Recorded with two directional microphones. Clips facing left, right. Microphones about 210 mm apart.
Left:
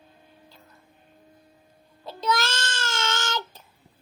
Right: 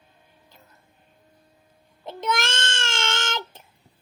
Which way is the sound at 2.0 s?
25° right (ahead or behind).